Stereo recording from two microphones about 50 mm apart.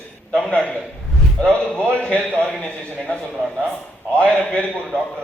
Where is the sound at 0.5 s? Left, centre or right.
Left.